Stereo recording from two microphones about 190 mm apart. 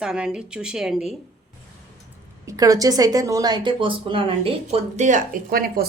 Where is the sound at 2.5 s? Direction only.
20° right (ahead or behind).